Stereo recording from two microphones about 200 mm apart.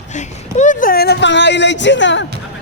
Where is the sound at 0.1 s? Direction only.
35° left (ahead or behind); by 2.2 s 65° left (ahead or behind).